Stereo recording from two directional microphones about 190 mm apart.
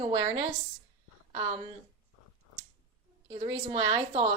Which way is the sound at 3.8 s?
30° right (ahead or behind).